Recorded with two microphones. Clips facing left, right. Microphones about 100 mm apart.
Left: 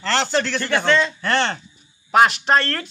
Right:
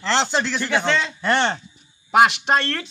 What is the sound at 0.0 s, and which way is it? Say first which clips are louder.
A man's voice: even; 15° right (ahead or behind).